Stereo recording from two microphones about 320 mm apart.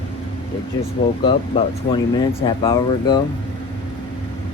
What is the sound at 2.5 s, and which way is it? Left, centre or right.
Speech, centre.